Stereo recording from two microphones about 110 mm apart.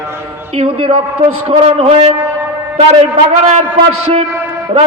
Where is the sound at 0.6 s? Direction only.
55° right (ahead or behind).